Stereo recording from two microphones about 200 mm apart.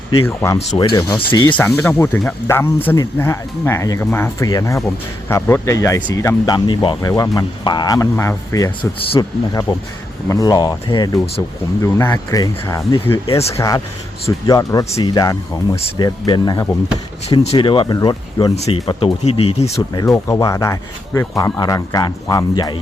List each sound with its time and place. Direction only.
0.3 s speech: 15° left (ahead or behind)
1.5 s speech: 10° left (ahead or behind)
15.7 s speech: 30° left (ahead or behind)
17.2 s speech: 30° left (ahead or behind)
19.9 s speech: 20° left (ahead or behind)